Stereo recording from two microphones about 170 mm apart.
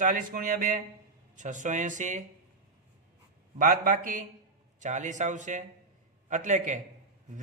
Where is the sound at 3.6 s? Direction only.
50° right (ahead or behind).